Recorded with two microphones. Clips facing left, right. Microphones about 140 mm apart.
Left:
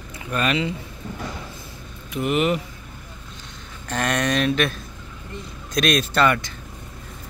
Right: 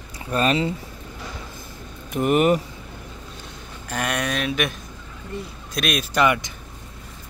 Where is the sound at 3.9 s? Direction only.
10° right (ahead or behind).